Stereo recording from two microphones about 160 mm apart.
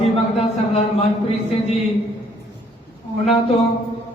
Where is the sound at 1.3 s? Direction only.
40° left (ahead or behind).